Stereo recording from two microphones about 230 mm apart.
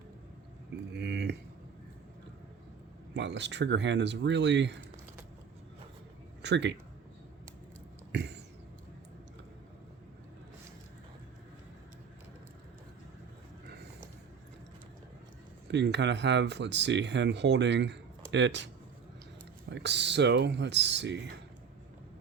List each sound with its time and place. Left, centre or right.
0.9 s a sound: right
3.2 s speech: right
6.4 s speech: right
8.1 s a sound: right
15.6 s speech: right
19.7 s speech: right